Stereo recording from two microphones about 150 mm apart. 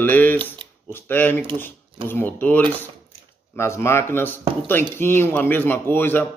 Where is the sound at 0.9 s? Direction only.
15° left (ahead or behind).